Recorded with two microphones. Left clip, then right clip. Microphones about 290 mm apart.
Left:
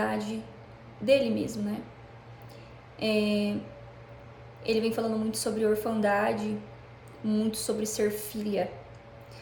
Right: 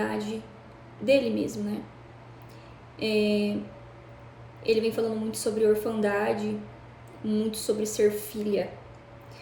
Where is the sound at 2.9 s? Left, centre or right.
Centre.